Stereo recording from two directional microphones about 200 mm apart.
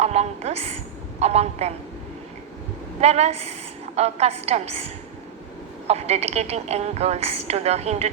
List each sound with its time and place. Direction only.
0.0 s a woman's voice: 30° right (ahead or behind)
3.0 s a woman's voice: 30° right (ahead or behind)
5.9 s a woman's voice: 30° right (ahead or behind)